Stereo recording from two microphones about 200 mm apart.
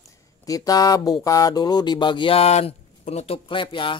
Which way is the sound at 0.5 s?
20° left (ahead or behind).